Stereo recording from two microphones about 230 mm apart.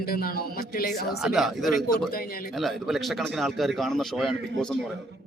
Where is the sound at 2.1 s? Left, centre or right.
Left.